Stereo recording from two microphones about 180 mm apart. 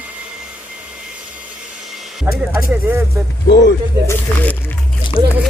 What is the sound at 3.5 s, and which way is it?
Speech, 70° left (ahead or behind).